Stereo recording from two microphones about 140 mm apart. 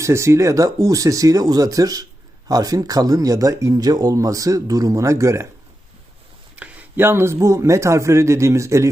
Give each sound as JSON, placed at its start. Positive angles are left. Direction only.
{"t": 0.0, "sound": "speech", "side_deg": -20}
{"t": 6.6, "sound": "speech", "side_deg": -15}